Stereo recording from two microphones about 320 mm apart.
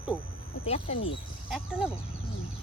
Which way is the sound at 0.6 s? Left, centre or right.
Centre.